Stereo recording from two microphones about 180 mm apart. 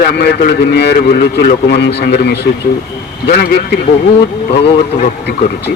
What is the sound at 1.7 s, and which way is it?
A man's voice, 70° left (ahead or behind).